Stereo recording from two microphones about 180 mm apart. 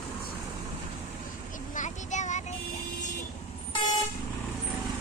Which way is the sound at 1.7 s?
40° left (ahead or behind).